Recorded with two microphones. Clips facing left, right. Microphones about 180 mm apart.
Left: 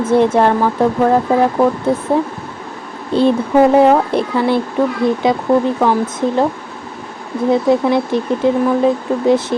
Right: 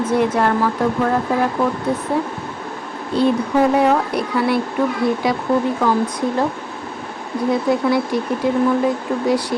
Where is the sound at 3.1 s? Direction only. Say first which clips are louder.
Left 4 dB; 30° left (ahead or behind).